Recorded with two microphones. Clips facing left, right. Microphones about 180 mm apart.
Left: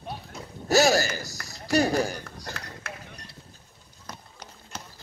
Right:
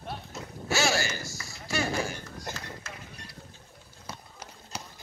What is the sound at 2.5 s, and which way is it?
Run, 20° right (ahead or behind).